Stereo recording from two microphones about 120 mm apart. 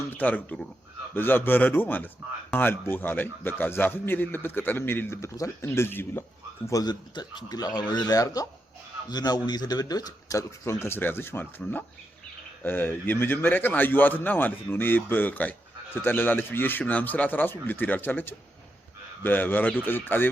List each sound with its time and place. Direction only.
0.0 s a man's voice: 15° left (ahead or behind)
6.7 s a man's voice: 30° left (ahead or behind); by 20.3 s 15° left (ahead or behind)